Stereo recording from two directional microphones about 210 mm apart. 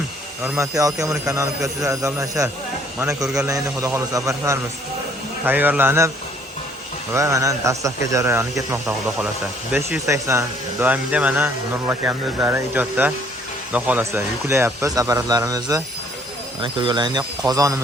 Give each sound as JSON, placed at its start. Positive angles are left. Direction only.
{"t": 0.4, "sound": "speech", "side_deg": -10}
{"t": 7.1, "sound": "speech", "side_deg": -15}